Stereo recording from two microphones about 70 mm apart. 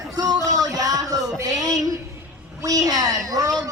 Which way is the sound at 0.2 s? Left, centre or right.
Right.